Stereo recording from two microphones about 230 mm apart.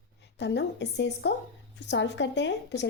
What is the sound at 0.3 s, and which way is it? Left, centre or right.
A woman's voice, left.